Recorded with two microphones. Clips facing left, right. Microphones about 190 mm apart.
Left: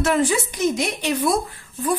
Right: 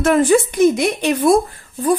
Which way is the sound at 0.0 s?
50° right (ahead or behind).